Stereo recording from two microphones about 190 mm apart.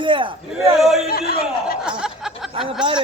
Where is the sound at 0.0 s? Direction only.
25° right (ahead or behind).